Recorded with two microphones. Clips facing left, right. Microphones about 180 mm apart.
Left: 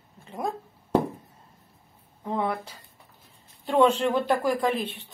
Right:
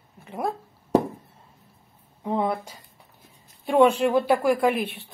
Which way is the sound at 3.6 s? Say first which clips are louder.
Right 3 dB; 10° right (ahead or behind).